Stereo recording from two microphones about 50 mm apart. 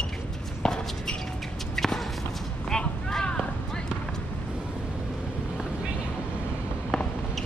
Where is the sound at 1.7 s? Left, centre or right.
Centre.